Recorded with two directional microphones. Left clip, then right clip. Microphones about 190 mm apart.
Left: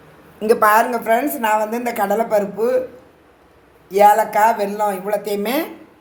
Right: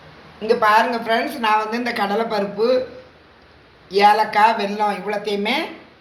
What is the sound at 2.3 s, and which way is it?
Speech, 60° left (ahead or behind).